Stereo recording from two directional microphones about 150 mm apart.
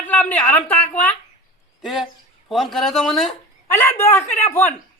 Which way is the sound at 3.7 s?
15° left (ahead or behind).